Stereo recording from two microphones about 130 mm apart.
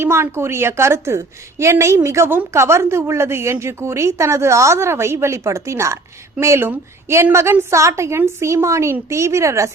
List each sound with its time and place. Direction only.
0.0 s speech: 20° right (ahead or behind)